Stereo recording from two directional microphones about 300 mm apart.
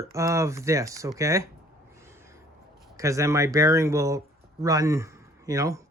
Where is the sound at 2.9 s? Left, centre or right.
Centre.